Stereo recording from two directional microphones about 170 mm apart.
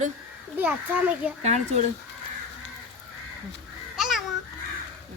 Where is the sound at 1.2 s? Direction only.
10° right (ahead or behind).